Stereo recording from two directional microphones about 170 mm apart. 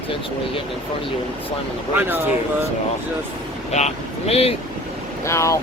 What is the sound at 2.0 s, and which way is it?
Speech, 10° right (ahead or behind).